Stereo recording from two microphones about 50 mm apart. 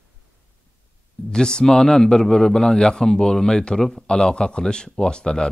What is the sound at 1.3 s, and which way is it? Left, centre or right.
A man's voice, centre.